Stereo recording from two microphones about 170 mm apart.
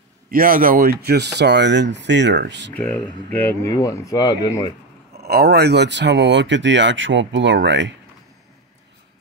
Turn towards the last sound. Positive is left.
turn(degrees=-90)